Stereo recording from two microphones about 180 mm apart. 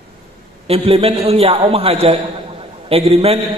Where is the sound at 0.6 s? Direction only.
35° right (ahead or behind).